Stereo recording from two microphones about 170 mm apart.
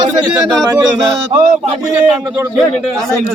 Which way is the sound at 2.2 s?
10° right (ahead or behind).